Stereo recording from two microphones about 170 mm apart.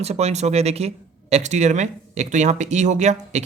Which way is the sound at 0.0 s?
40° right (ahead or behind).